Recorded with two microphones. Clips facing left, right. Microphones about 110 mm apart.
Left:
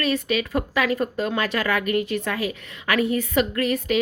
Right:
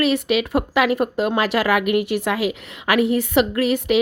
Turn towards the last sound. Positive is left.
turn(degrees=-70)  # may be behind; listen again after turning